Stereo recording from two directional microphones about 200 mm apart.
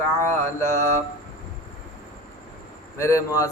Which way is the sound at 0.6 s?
15° left (ahead or behind).